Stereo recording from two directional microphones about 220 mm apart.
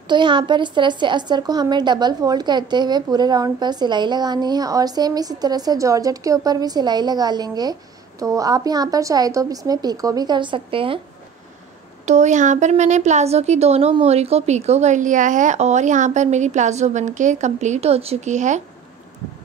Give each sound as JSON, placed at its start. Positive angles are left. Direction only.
{"t": 0.1, "sound": "a woman's voice", "side_deg": -20}
{"t": 12.1, "sound": "a woman's voice", "side_deg": -30}